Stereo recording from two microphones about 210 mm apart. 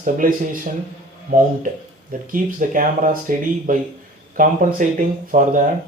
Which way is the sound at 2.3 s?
40° right (ahead or behind).